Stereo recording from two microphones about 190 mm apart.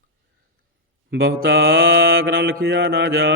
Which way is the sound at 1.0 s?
65° right (ahead or behind).